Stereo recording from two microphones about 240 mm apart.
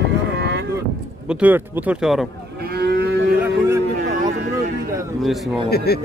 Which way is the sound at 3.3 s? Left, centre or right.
Centre.